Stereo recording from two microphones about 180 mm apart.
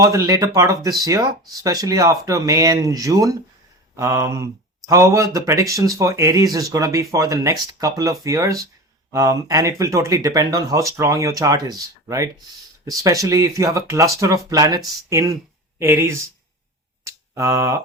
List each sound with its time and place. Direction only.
0.0 s speech: 20° right (ahead or behind)
17.0 s finger snapping: 15° right (ahead or behind)